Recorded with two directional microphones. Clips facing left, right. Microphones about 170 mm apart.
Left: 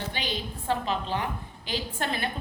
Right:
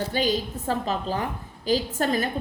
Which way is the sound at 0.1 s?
40° right (ahead or behind).